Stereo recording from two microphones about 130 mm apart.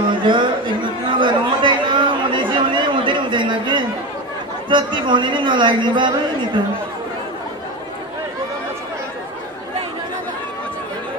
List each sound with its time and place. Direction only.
0.1 s chatter: 40° right (ahead or behind)
4.6 s a man's voice: 40° right (ahead or behind)